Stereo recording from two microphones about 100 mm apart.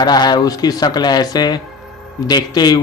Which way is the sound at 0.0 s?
45° left (ahead or behind).